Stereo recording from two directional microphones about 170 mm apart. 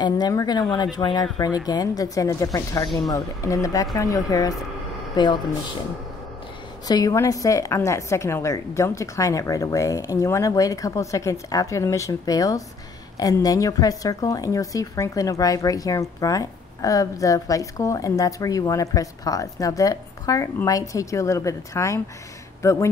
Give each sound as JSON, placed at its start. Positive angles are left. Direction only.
{"t": 0.0, "sound": "speech", "side_deg": 20}
{"t": 6.9, "sound": "speech", "side_deg": 20}